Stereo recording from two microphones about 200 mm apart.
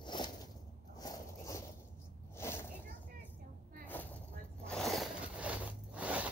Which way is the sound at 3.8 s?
10° left (ahead or behind).